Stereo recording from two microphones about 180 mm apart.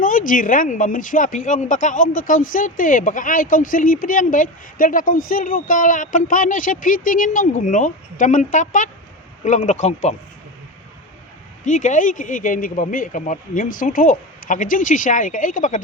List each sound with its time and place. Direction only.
0.0 s speech: 50° left (ahead or behind)
11.6 s speech: 45° left (ahead or behind)